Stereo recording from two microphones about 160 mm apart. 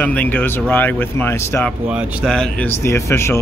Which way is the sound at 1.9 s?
5° right (ahead or behind).